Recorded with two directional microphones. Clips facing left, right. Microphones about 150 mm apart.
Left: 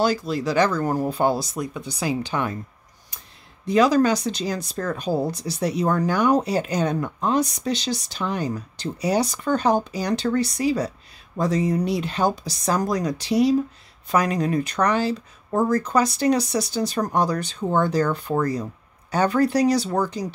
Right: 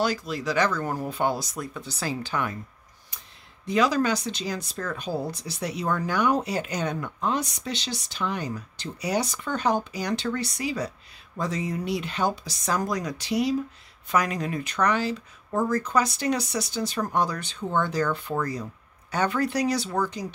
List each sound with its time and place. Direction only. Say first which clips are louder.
0.0 s speech: left 5 dB; 35° left (ahead or behind)
1.6 s speech: left 5 dB; 15° left (ahead or behind)
3.6 s speech: left 5 dB; 40° left (ahead or behind)